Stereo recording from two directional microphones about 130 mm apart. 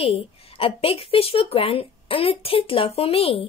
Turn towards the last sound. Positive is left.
turn(degrees=50)  # may be behind; listen again after turning